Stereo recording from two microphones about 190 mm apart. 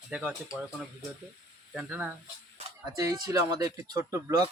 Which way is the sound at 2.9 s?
20° right (ahead or behind).